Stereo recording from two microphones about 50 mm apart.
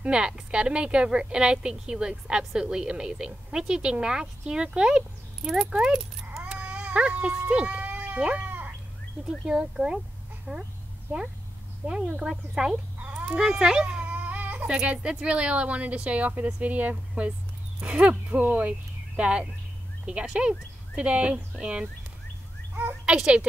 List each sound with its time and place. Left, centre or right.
0.0 s speech: right
6.6 s speech: right
7.8 s cat: right
8.5 s bird: right
9.5 s speech: centre
11.8 s speech: right
13.4 s baby cry: centre; by 14.7 s right
14.7 s speech: right
23.0 s a child's voice: centre